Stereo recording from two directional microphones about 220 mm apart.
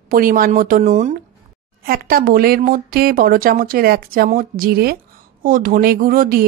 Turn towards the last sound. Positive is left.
turn(degrees=-40)  # may be behind; listen again after turning